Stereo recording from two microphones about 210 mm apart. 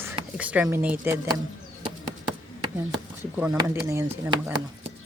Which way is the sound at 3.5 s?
15° right (ahead or behind).